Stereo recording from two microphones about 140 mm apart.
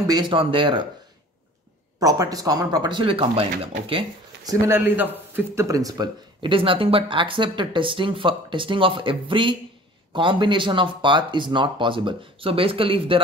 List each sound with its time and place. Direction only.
0.0 s speech: 30° right (ahead or behind)
2.0 s speech: 25° right (ahead or behind)
4.5 s speech: 15° right (ahead or behind); by 13.2 s 40° right (ahead or behind)